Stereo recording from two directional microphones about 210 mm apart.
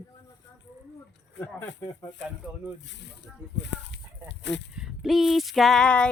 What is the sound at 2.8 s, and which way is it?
Speech, 55° left (ahead or behind).